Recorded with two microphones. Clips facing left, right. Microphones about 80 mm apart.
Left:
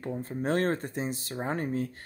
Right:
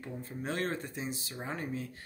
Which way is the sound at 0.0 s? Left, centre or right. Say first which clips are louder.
Left 7 dB; left.